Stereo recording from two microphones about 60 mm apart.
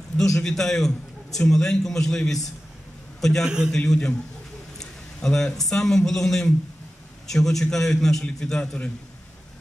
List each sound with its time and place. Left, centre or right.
0.2 s a man's voice: centre
3.4 s a man's voice: centre
3.7 s a man's voice: centre